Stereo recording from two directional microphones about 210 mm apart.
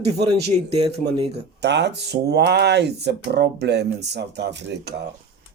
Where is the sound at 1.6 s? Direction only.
55° right (ahead or behind).